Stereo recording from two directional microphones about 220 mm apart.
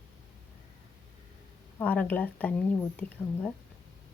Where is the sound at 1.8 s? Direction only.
5° left (ahead or behind).